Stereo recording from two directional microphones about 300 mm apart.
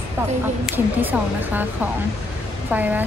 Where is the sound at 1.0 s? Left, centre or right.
Centre.